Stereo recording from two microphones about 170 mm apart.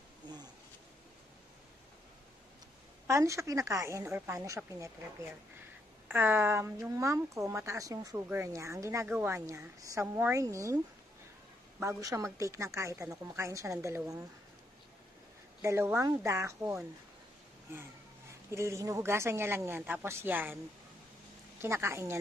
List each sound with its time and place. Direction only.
3.1 s a woman's voice: 15° right (ahead or behind)
12.0 s a woman's voice: 20° right (ahead or behind)
15.6 s a woman's voice: 15° right (ahead or behind)
18.5 s a woman's voice: 15° right (ahead or behind)
21.5 s a woman's voice: 15° right (ahead or behind)